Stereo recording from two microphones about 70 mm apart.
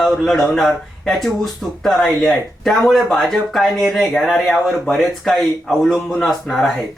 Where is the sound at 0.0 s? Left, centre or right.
Centre.